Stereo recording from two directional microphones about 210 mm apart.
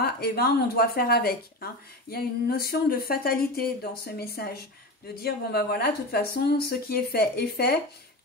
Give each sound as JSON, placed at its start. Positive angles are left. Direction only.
{"t": 0.0, "sound": "speech", "side_deg": 45}